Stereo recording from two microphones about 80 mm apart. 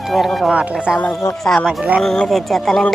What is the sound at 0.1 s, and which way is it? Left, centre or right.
Speech, centre.